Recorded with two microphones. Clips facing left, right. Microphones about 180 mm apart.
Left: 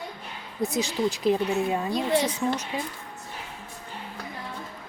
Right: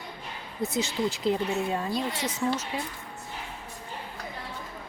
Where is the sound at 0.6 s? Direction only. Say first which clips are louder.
Left 2 dB; 15° left (ahead or behind).